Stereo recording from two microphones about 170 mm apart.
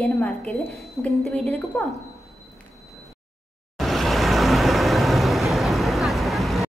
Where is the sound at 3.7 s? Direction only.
Centre (ahead or behind).